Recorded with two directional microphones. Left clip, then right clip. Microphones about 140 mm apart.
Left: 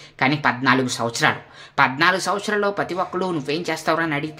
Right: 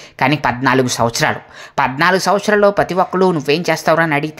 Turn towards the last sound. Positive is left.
turn(degrees=-45)  # may be behind; listen again after turning